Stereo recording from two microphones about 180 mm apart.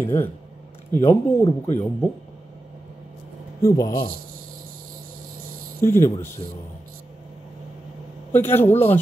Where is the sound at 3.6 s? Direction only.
20° left (ahead or behind).